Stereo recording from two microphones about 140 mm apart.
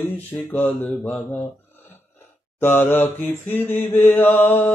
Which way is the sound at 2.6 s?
15° left (ahead or behind).